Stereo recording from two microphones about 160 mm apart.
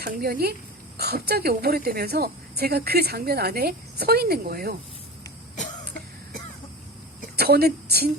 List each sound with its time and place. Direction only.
0.0 s a woman's voice: 70° right (ahead or behind)
7.3 s a woman's voice: 75° right (ahead or behind)